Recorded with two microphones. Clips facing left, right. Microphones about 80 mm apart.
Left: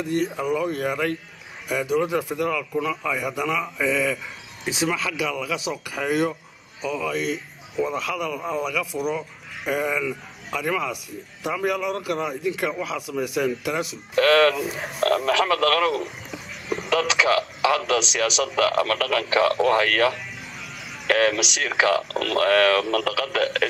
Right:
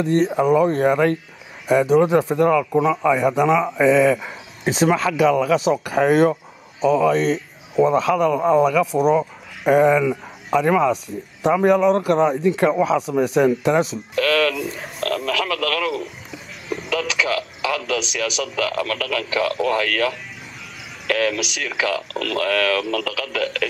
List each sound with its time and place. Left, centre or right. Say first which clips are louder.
0.2 s a man's voice: right 8 dB; right
2.8 s a man's voice: right 9 dB; right
6.8 s a man's voice: right 10 dB; right
9.9 s a man's voice: right 8 dB; right
14.1 s a man's voice: left 2 dB; left
14.6 s a man's voice: left 2 dB; centre